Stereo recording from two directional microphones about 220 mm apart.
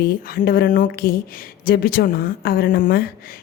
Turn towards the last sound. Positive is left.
turn(degrees=45)  # may be behind; listen again after turning